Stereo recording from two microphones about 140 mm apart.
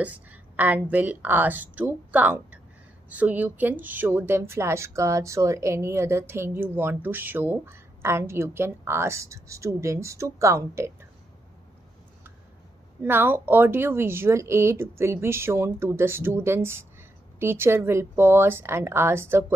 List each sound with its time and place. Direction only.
0.0 s a woman's voice: 10° right (ahead or behind)
13.0 s speech: 15° right (ahead or behind)